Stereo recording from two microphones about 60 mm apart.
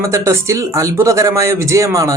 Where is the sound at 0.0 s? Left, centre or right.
Right.